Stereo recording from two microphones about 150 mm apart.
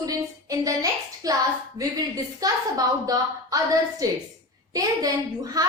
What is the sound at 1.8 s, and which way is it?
A woman's voice, 25° right (ahead or behind).